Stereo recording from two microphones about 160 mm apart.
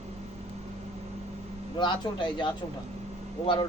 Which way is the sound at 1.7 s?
30° left (ahead or behind).